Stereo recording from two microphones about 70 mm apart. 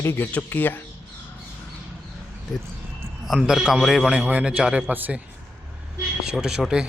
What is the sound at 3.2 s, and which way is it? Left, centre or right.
Speech, centre.